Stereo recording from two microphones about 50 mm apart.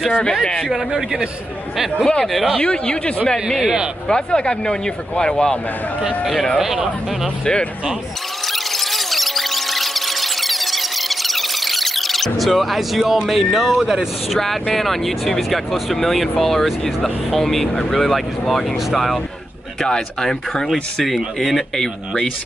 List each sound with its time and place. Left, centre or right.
0.2 s speech: centre
0.7 s speech: centre
2.0 s speech: centre
2.2 s speech: centre
2.6 s speech: centre
3.6 s a man's voice: centre
4.1 s speech: centre
6.2 s speech: centre
8.5 s a sound: centre
13.3 s speech: centre